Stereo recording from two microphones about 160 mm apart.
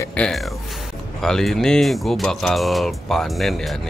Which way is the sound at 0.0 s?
10° left (ahead or behind).